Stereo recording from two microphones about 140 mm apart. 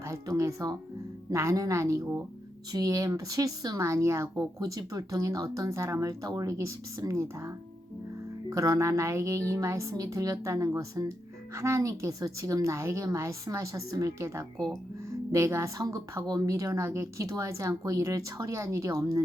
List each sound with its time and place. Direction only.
0.0 s speech: 20° right (ahead or behind)